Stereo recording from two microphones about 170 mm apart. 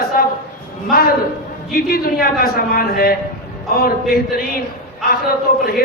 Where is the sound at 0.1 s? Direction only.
60° left (ahead or behind).